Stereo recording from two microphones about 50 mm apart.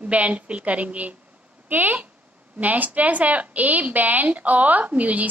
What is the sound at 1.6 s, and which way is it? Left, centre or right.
A woman's voice, right.